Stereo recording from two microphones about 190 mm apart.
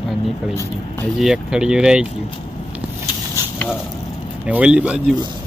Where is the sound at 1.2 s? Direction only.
5° right (ahead or behind).